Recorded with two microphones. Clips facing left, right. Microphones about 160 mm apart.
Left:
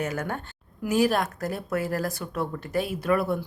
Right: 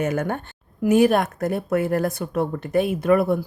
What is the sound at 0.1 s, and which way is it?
A woman's voice, 55° right (ahead or behind).